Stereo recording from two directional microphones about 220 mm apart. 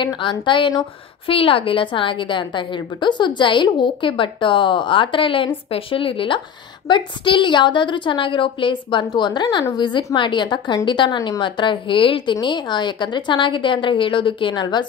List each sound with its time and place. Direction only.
0.0 s a woman's voice: 20° left (ahead or behind)